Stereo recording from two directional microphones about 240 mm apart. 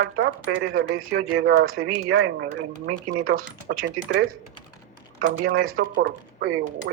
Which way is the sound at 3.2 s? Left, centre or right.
Right.